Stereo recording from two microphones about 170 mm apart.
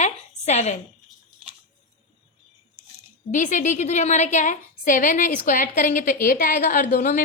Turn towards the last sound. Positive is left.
turn(degrees=50)  # may be behind; listen again after turning